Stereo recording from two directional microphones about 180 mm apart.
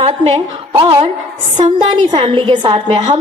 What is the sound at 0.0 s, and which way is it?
A woman's voice, 35° right (ahead or behind).